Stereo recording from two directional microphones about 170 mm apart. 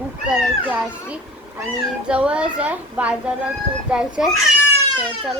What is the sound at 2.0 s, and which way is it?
A woman's voice, 5° right (ahead or behind).